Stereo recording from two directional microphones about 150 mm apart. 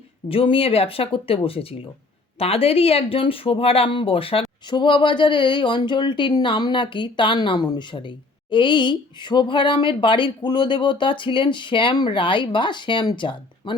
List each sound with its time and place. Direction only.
0.3 s speech: 35° left (ahead or behind)